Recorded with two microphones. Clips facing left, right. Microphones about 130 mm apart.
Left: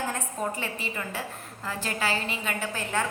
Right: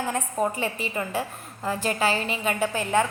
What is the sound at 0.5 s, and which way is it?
A woman's voice, 15° right (ahead or behind).